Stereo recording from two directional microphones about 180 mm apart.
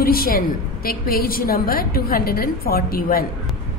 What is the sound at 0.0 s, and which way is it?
A woman's voice, 55° left (ahead or behind).